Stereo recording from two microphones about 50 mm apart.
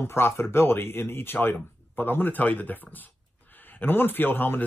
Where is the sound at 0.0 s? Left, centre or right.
Left.